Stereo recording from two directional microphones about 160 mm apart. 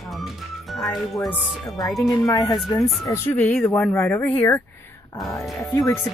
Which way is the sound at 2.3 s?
25° left (ahead or behind).